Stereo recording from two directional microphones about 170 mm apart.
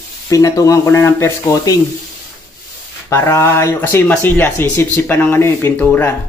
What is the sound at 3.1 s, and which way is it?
Speech, 15° left (ahead or behind).